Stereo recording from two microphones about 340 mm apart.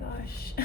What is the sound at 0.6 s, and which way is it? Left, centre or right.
Speech, left.